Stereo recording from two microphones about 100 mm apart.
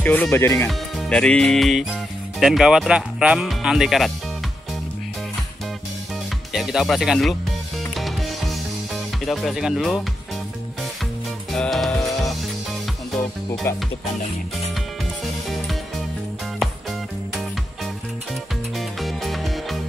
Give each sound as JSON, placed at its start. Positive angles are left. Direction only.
{"t": 0.0, "sound": "speech", "side_deg": 15}
{"t": 0.7, "sound": "speech", "side_deg": 5}
{"t": 6.5, "sound": "speech", "side_deg": -5}
{"t": 7.9, "sound": "music", "side_deg": 0}
{"t": 11.5, "sound": "music", "side_deg": 5}
{"t": 13.7, "sound": "music", "side_deg": 25}
{"t": 18.8, "sound": "music", "side_deg": 0}